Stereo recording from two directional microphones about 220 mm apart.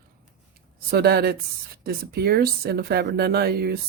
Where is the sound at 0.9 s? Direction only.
45° right (ahead or behind).